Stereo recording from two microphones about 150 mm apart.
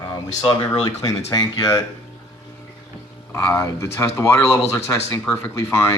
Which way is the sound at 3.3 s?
20° left (ahead or behind).